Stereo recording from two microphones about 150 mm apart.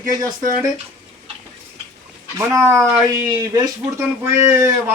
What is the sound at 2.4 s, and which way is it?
Speech, 15° right (ahead or behind).